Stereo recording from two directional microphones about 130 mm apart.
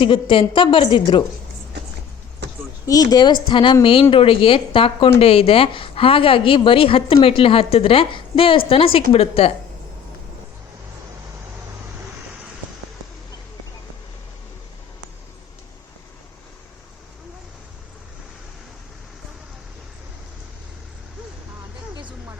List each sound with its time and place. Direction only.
0.0 s a woman's voice: 40° left (ahead or behind)
2.8 s a woman's voice: 30° left (ahead or behind); by 9.5 s 50° left (ahead or behind)